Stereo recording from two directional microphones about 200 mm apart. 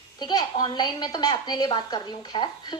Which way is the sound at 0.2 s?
20° left (ahead or behind).